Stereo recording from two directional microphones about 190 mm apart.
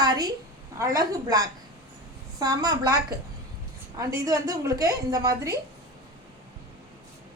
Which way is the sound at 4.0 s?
15° right (ahead or behind).